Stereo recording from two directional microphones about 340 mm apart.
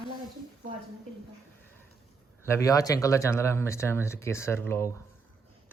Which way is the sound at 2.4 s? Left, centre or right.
Centre.